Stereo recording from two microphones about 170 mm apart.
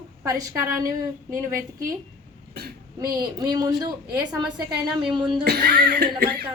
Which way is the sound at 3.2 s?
20° right (ahead or behind).